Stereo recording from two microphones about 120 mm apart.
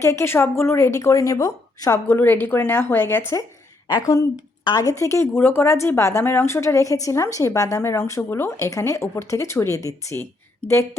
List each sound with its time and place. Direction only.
0.0 s speech: 25° left (ahead or behind)
2.0 s speech: 15° left (ahead or behind)
3.8 s speech: 30° left (ahead or behind)